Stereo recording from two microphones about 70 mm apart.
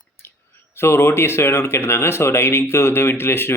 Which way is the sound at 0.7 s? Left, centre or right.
Left.